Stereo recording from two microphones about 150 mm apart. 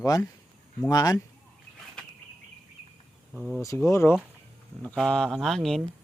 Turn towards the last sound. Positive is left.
turn(degrees=5)  # may be behind; listen again after turning